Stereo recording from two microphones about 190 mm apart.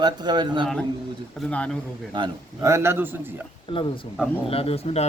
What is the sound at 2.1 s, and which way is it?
A man's voice, 20° right (ahead or behind).